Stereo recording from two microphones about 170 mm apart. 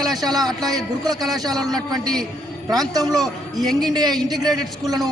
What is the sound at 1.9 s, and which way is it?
A man's voice, 5° left (ahead or behind).